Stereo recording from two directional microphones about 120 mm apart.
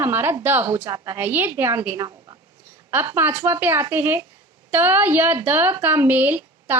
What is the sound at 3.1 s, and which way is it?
A woman's voice, 20° right (ahead or behind).